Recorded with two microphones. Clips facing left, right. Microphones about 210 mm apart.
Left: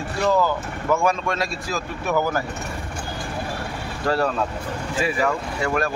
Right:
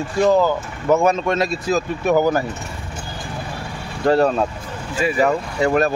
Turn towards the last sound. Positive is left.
turn(degrees=-20)  # may be behind; listen again after turning